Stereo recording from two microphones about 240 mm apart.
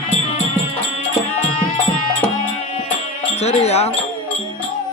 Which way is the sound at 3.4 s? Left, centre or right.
Left.